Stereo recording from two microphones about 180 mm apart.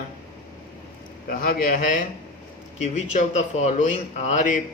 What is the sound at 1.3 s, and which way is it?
Speech, 55° left (ahead or behind).